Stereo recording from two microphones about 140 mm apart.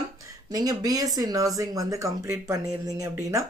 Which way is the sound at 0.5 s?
30° right (ahead or behind).